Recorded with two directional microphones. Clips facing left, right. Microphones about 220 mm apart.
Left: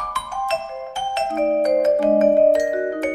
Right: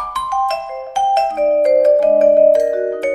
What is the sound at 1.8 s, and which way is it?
Music, 35° right (ahead or behind).